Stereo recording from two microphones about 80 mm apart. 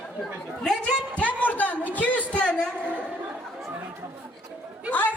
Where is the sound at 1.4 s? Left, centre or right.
Left.